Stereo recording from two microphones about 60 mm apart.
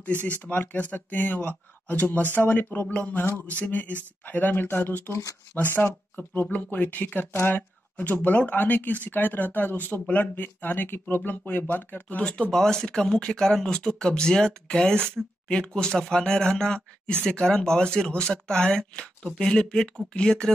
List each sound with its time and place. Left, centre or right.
0.4 s speech: left
12.2 s speech: centre